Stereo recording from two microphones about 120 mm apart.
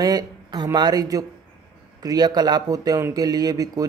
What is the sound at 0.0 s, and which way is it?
A man's voice, 35° right (ahead or behind).